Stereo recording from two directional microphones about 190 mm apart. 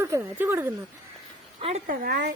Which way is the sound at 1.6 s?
35° right (ahead or behind).